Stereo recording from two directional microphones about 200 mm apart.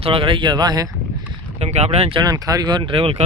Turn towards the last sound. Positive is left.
turn(degrees=-30)  # may be behind; listen again after turning